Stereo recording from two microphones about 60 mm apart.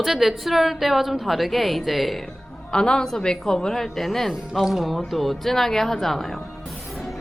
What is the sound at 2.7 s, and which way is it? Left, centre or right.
A woman's voice, centre.